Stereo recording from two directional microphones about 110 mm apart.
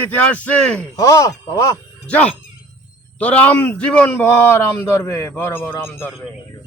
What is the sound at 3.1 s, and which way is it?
A man's voice, 10° left (ahead or behind).